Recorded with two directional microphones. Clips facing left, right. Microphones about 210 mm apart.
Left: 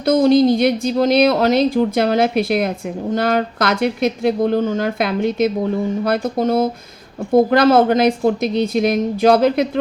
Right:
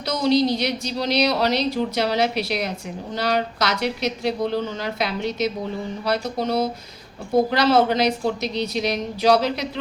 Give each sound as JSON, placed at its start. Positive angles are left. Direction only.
{"t": 0.0, "sound": "a woman's voice", "side_deg": 50}